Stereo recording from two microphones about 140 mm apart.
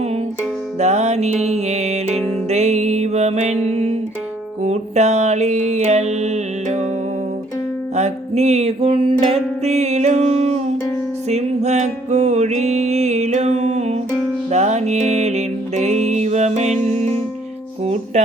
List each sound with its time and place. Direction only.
0.8 s music: 50° right (ahead or behind)
4.6 s mantra: 55° right (ahead or behind)
7.9 s music: 50° right (ahead or behind)